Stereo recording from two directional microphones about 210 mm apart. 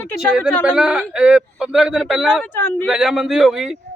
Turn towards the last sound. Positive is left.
turn(degrees=0)  # may be behind; listen again after turning